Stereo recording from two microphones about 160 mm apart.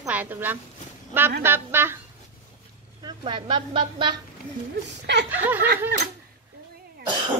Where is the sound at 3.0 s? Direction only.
30° right (ahead or behind).